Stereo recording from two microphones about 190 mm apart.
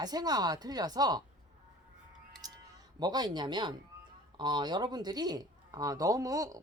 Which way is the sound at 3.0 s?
20° right (ahead or behind).